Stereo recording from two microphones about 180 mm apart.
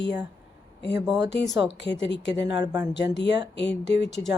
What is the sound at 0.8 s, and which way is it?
Speech, 70° left (ahead or behind).